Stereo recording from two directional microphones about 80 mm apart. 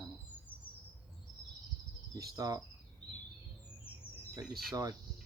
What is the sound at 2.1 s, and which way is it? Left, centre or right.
Cricket, right.